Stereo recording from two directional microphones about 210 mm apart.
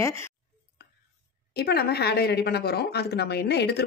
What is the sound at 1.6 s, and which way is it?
A woman's voice, 50° left (ahead or behind).